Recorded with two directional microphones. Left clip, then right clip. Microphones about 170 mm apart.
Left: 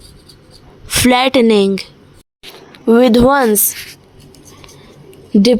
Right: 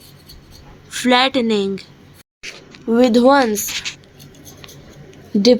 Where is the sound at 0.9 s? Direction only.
50° left (ahead or behind).